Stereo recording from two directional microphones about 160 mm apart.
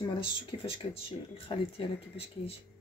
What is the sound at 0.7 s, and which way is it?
Speech, 35° left (ahead or behind).